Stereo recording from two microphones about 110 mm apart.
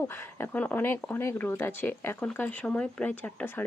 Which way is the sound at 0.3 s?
15° left (ahead or behind).